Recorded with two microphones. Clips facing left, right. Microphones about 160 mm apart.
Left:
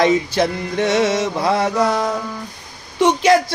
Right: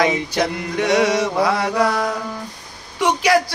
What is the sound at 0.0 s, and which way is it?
Male singing, 25° left (ahead or behind).